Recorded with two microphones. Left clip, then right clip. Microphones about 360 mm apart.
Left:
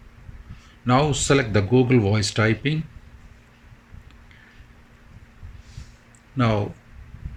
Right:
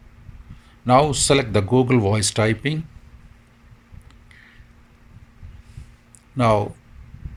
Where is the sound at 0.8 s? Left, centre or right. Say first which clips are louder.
Right 5 dB; centre.